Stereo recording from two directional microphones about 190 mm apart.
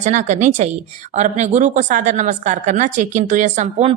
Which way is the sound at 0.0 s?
40° right (ahead or behind).